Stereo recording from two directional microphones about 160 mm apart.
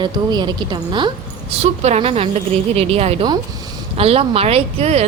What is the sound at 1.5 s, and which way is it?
A woman's voice, 40° right (ahead or behind).